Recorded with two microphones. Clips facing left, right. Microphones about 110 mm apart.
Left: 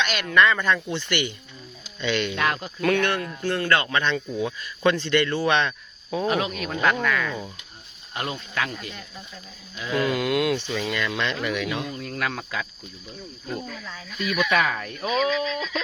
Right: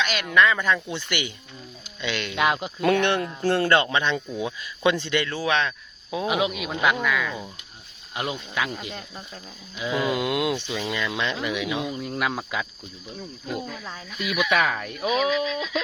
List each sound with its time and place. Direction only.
0.0 s speech: 5° right (ahead or behind)
2.4 s speech: 15° right (ahead or behind)
4.0 s speech: 15° right (ahead or behind)
8.9 s speech: 50° right (ahead or behind)
9.7 s speech: 15° right (ahead or behind)
14.1 s speech: 10° right (ahead or behind)